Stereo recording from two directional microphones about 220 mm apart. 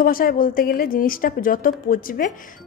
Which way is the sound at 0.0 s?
40° left (ahead or behind).